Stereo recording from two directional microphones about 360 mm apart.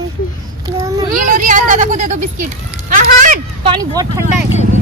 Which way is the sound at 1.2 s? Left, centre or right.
Right.